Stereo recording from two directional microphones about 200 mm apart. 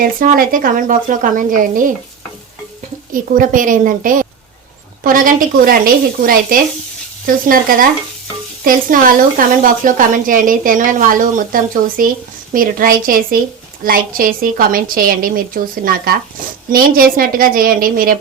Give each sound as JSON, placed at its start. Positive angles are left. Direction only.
{"t": 0.0, "sound": "a woman's voice", "side_deg": -45}
{"t": 3.1, "sound": "a woman's voice", "side_deg": -45}